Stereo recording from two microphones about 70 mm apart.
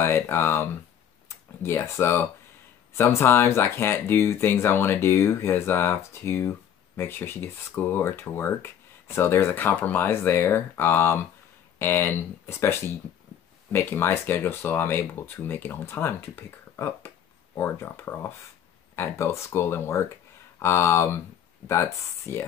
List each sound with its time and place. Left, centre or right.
0.0 s speech: left